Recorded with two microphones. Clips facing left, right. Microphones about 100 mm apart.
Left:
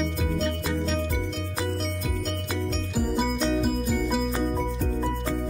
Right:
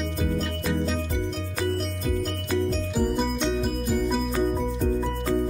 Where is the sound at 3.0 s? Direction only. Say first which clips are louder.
Even; 5° left (ahead or behind).